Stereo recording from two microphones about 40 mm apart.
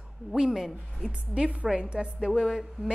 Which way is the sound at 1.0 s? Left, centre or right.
Right.